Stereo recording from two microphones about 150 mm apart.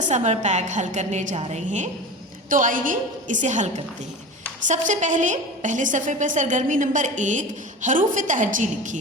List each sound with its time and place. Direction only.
0.0 s a woman's voice: 55° right (ahead or behind)
2.5 s a woman's voice: 60° right (ahead or behind)
4.7 s a woman's voice: 55° right (ahead or behind)